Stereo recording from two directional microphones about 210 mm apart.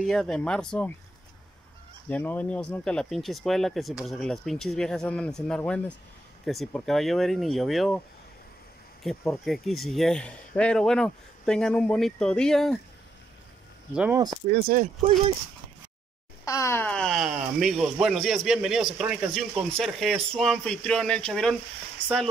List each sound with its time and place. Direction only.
0.0 s speech: centre (ahead or behind)
2.0 s speech: 5° left (ahead or behind)
9.0 s speech: centre (ahead or behind)
13.9 s speech: 5° right (ahead or behind)
14.5 s speech: 40° right (ahead or behind)
16.4 s speech: 15° left (ahead or behind)